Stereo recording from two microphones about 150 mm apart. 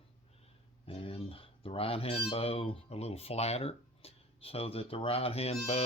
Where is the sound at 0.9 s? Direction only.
40° left (ahead or behind).